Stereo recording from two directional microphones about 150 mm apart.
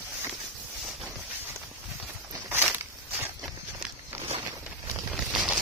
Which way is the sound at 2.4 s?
10° right (ahead or behind).